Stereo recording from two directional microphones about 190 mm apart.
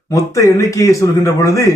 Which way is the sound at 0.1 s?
15° left (ahead or behind).